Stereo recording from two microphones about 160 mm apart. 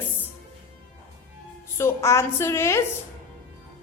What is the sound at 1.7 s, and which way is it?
A woman's voice, 15° left (ahead or behind).